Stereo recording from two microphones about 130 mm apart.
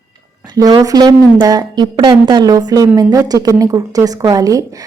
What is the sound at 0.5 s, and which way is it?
A woman's voice, 30° right (ahead or behind).